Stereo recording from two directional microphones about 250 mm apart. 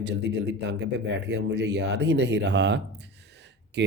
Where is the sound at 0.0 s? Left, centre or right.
Right.